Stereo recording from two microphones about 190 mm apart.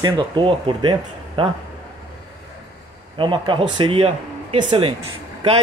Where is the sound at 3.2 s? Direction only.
25° right (ahead or behind).